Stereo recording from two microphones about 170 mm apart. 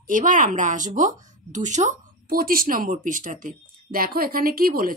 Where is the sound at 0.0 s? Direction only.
50° right (ahead or behind).